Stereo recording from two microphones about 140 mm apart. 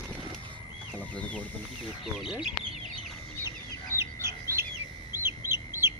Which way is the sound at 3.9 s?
20° right (ahead or behind).